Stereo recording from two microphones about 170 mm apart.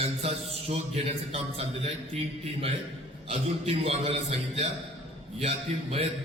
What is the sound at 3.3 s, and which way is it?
Speech, 40° right (ahead or behind).